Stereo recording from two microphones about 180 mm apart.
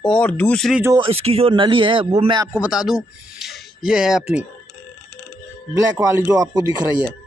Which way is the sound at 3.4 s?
Centre (ahead or behind).